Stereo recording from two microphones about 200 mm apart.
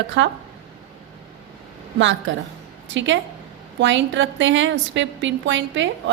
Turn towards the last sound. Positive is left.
turn(degrees=-65)  # may be behind; listen again after turning